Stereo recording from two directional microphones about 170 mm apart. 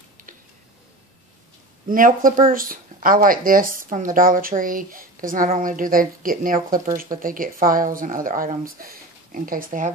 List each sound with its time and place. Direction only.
1.9 s speech: 55° right (ahead or behind)